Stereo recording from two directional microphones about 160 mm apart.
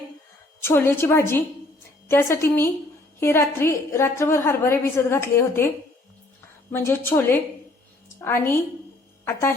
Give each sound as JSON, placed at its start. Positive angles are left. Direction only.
{"t": 0.6, "sound": "a woman's voice", "side_deg": 15}